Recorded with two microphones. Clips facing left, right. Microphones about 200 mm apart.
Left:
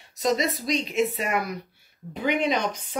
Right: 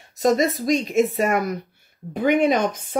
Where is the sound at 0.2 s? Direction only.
50° right (ahead or behind).